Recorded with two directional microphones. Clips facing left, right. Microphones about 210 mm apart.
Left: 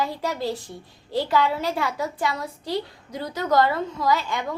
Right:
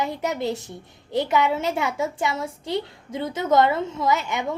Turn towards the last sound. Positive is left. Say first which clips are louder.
# right 1 dB
turn(degrees=-20)  # may be behind; listen again after turning